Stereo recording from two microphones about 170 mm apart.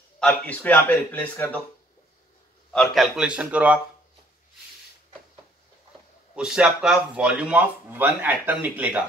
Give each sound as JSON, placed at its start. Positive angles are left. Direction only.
{"t": 0.2, "sound": "a man's voice", "side_deg": 10}
{"t": 2.7, "sound": "speech", "side_deg": 5}
{"t": 6.3, "sound": "speech", "side_deg": -5}